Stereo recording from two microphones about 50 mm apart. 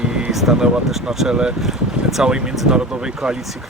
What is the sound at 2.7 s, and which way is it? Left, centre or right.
Speech, centre.